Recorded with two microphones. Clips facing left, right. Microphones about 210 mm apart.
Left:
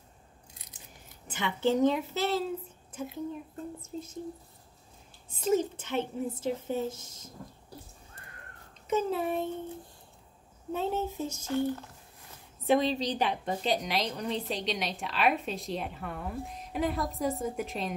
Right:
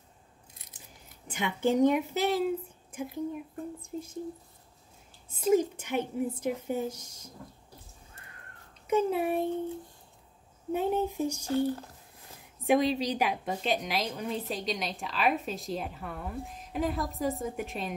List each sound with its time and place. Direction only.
1.3 s a woman's voice: 15° right (ahead or behind)
3.8 s a woman's voice: 10° right (ahead or behind)
5.4 s a woman's voice: 10° right (ahead or behind)
8.8 s a woman's voice: 10° right (ahead or behind)
10.7 s a woman's voice: 15° right (ahead or behind)
11.4 s speech: 35° right (ahead or behind)
12.6 s a woman's voice: 10° right (ahead or behind)